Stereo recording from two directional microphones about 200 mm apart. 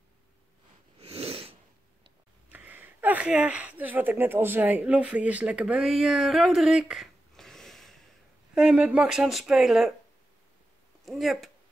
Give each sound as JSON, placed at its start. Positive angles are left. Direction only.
{"t": 1.0, "sound": "sneeze", "side_deg": -30}
{"t": 2.5, "sound": "speech", "side_deg": -10}
{"t": 11.1, "sound": "speech", "side_deg": 0}